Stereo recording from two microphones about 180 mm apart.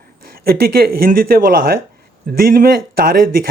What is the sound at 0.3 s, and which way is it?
Speech, 55° right (ahead or behind).